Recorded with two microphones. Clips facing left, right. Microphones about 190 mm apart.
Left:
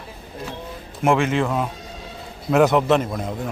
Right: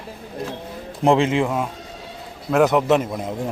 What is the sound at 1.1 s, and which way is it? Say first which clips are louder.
Speech: right 1 dB; 20° right (ahead or behind).